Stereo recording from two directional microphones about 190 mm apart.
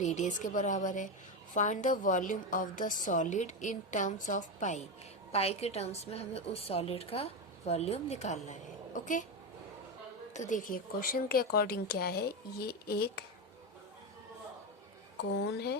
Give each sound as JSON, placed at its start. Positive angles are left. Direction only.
{"t": 0.0, "sound": "a woman's voice", "side_deg": 40}
{"t": 10.3, "sound": "a woman's voice", "side_deg": 40}
{"t": 15.5, "sound": "speech", "side_deg": 60}